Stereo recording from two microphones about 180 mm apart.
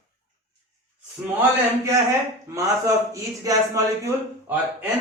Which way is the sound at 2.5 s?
15° right (ahead or behind).